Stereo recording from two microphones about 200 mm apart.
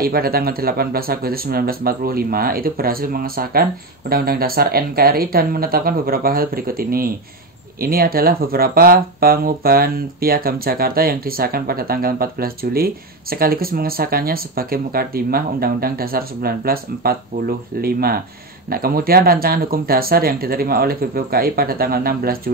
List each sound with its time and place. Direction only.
0.0 s speech: 50° right (ahead or behind)